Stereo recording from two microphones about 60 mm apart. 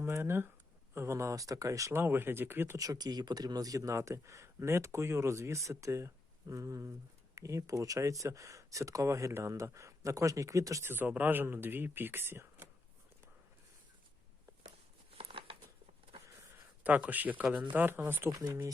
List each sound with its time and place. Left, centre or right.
0.0 s speech: right
0.9 s speech: right
1.9 s speech: right
2.7 s speech: right
6.5 s speech: right
10.8 s speech: right
16.8 s speech: right
17.4 s speech: centre
17.7 s speech: right
18.3 s speech: right